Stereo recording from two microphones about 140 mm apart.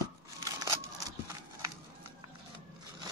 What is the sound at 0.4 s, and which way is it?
Scissors, 20° right (ahead or behind).